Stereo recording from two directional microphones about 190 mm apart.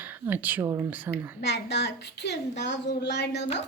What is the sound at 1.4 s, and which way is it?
A woman's voice, 65° left (ahead or behind).